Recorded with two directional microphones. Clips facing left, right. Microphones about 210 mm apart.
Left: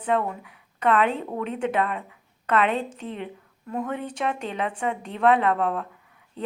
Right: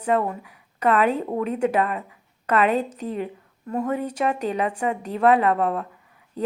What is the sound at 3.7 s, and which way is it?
A woman's voice, 10° right (ahead or behind).